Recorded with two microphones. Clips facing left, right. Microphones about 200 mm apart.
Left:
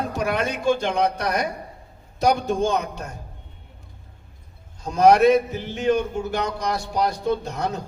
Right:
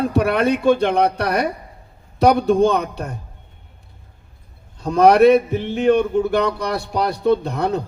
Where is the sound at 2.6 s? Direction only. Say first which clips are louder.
Right 5 dB; 60° right (ahead or behind).